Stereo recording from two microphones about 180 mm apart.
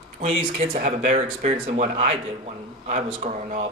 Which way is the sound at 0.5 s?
40° right (ahead or behind).